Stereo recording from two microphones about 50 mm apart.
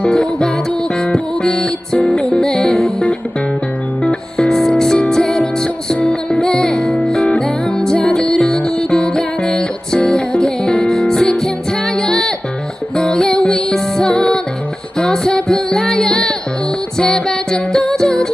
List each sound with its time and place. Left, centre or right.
0.0 s music: centre
5.9 s music: left